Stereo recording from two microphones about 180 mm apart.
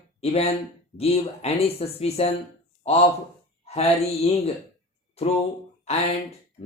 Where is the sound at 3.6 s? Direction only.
35° left (ahead or behind).